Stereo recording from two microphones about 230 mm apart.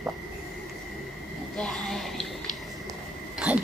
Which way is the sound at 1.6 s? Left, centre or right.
Centre.